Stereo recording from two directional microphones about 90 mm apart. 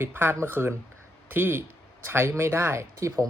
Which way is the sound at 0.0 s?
25° right (ahead or behind).